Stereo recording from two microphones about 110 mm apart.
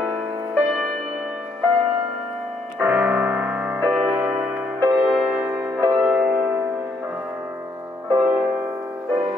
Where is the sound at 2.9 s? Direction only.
5° right (ahead or behind).